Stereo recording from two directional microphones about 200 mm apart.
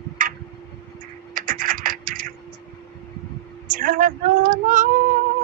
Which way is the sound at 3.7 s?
45° right (ahead or behind).